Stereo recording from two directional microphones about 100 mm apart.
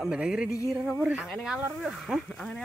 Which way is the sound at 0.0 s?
5° right (ahead or behind).